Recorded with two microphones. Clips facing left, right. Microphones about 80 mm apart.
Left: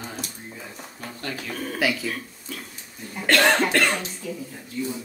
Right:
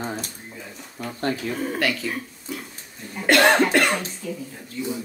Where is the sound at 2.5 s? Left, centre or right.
Centre.